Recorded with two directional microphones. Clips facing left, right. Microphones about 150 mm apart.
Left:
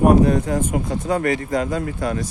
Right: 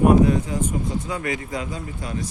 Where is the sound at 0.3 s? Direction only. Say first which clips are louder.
Left 3 dB; 45° left (ahead or behind).